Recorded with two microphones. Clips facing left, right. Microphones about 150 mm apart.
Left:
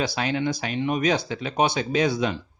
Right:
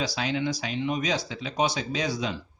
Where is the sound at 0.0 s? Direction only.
55° left (ahead or behind).